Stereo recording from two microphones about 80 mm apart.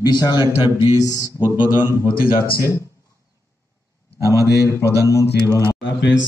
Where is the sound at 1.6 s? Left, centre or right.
Right.